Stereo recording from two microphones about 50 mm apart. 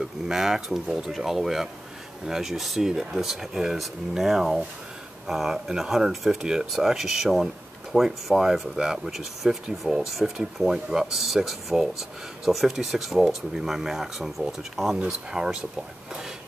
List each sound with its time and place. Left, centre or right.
0.0 s speech: centre